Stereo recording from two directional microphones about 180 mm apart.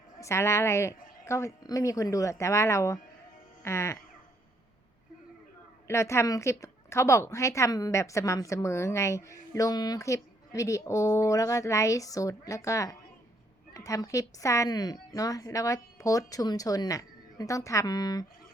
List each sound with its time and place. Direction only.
0.2 s a woman's voice: 15° left (ahead or behind)
5.9 s a woman's voice: 15° left (ahead or behind)